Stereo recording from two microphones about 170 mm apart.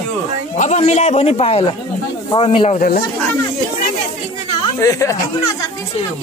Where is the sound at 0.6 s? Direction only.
40° left (ahead or behind).